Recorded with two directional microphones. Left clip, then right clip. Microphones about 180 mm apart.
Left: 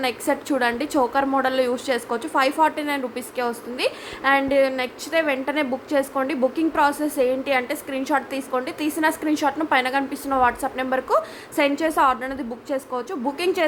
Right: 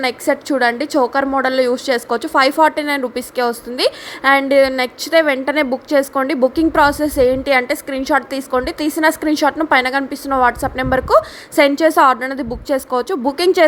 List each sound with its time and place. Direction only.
0.0 s a woman's voice: 25° right (ahead or behind)